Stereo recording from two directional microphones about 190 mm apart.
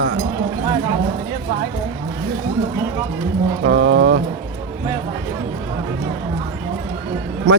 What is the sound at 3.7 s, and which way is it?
Speech, 85° right.